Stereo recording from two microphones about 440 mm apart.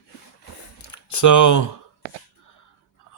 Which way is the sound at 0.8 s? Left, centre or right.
Left.